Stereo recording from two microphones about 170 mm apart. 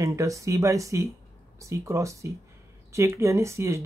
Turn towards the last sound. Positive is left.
turn(degrees=-15)  # may be behind; listen again after turning